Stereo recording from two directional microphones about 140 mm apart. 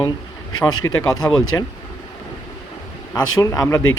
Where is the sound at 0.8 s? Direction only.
20° left (ahead or behind).